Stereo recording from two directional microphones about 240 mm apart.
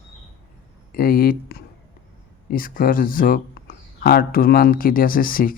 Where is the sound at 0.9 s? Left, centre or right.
Left.